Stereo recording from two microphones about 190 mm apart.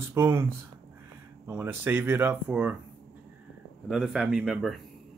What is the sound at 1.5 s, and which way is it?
A man's voice, 10° right (ahead or behind).